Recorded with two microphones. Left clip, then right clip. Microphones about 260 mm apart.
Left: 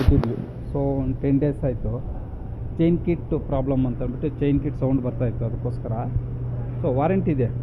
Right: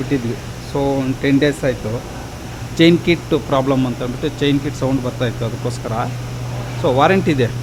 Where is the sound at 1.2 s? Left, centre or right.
Centre.